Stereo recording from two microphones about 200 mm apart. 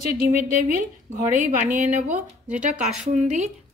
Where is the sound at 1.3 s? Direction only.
40° right (ahead or behind).